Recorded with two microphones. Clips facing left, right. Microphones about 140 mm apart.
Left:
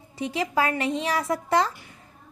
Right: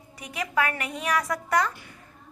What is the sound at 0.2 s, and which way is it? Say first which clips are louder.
A child's voice: left 3 dB; 30° left (ahead or behind).